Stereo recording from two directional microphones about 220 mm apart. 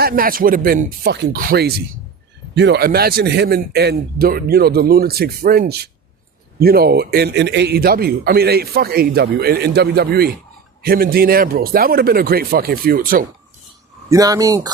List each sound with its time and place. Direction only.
0.0 s a man's voice: 40° right (ahead or behind)
14.1 s speech: 15° right (ahead or behind)